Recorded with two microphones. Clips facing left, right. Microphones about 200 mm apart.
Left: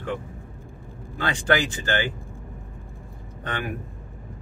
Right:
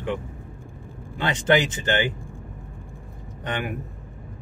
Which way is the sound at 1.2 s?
20° right (ahead or behind).